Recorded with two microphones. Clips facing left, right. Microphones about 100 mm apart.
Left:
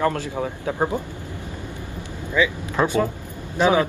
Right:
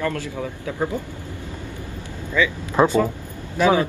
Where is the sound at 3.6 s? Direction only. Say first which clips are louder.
Even; 20° left (ahead or behind).